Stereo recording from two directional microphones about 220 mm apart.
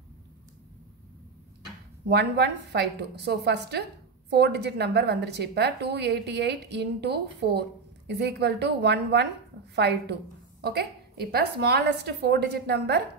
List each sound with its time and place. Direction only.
2.0 s a woman's voice: 50° right (ahead or behind)